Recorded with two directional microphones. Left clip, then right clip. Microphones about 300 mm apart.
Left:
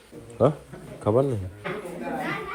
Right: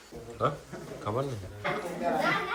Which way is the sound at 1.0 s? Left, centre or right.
Centre.